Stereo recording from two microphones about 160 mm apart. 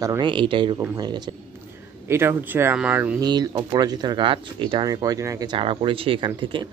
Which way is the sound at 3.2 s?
25° right (ahead or behind).